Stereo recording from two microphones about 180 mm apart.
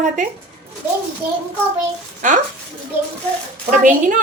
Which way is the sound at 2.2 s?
45° right (ahead or behind).